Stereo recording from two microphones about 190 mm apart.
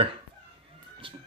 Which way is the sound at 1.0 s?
25° right (ahead or behind).